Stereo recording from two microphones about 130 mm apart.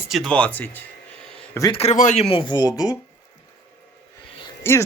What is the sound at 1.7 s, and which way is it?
Speech, 60° left (ahead or behind).